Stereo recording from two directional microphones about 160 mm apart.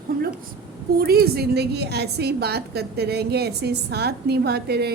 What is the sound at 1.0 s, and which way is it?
A woman's voice, 75° right (ahead or behind).